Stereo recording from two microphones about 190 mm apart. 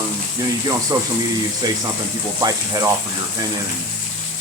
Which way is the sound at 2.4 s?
20° right (ahead or behind).